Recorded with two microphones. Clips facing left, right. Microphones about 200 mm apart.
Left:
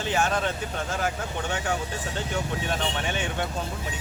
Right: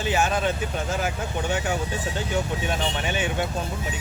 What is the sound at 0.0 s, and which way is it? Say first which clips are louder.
Speech: right 2 dB; 5° right (ahead or behind).